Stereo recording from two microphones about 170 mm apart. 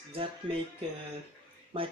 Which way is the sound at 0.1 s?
35° right (ahead or behind).